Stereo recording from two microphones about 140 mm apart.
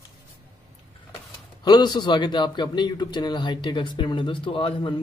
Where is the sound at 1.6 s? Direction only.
30° left (ahead or behind).